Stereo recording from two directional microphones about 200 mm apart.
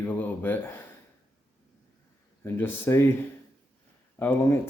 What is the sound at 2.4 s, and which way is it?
Speech, 10° left (ahead or behind).